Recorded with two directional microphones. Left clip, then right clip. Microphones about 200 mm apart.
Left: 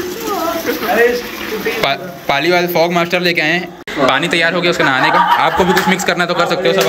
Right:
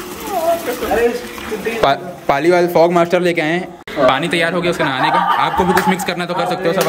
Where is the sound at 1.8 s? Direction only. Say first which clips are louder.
Right 2 dB; 25° right (ahead or behind).